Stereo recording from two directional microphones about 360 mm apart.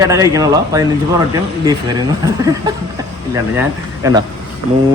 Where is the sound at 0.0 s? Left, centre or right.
Centre.